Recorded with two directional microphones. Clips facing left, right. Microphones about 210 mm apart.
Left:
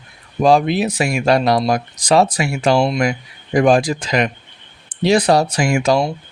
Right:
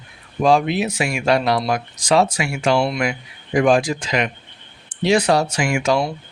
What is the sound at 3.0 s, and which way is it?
Speech, 40° left (ahead or behind).